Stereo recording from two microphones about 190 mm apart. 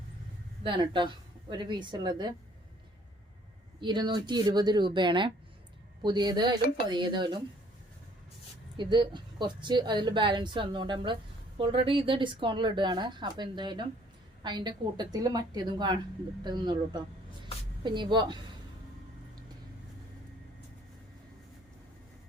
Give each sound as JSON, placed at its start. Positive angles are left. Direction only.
{"t": 0.6, "sound": "a woman's voice", "side_deg": -25}
{"t": 3.8, "sound": "a woman's voice", "side_deg": -25}
{"t": 8.8, "sound": "a woman's voice", "side_deg": -25}
{"t": 17.4, "sound": "a sound", "side_deg": -25}